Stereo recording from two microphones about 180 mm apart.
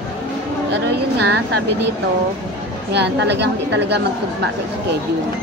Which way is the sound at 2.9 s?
70° right (ahead or behind).